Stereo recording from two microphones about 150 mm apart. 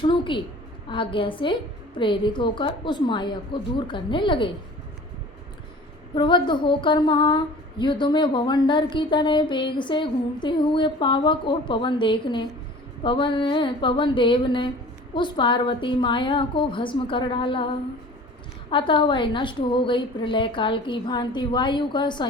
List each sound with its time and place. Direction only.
0.0 s a sound: 35° left (ahead or behind)
0.9 s speech: 35° left (ahead or behind)
6.1 s speech: 30° left (ahead or behind)
18.7 s speech: 35° left (ahead or behind)